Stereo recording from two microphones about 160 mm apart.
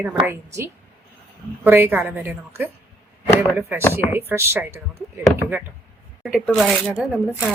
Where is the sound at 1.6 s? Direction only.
10° right (ahead or behind).